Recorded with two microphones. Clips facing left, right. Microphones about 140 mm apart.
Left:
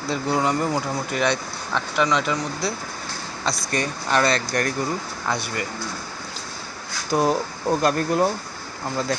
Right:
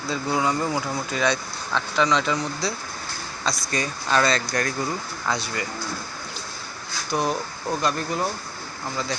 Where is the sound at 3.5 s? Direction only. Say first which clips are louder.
Left 2 dB; 60° left (ahead or behind).